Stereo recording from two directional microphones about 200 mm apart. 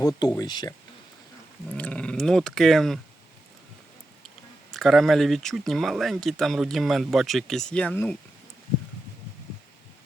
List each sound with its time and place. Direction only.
0.0 s speech: 15° left (ahead or behind)
1.7 s speech: 5° left (ahead or behind)
4.7 s speech: centre (ahead or behind)